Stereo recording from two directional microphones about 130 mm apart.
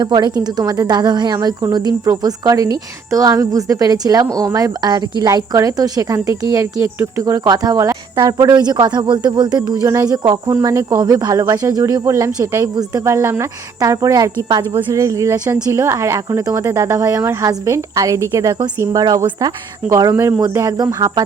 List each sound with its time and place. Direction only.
0.0 s a woman's voice: 35° right (ahead or behind)